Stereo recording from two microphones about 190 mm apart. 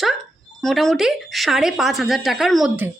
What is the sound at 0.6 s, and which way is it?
A woman's voice, centre (ahead or behind).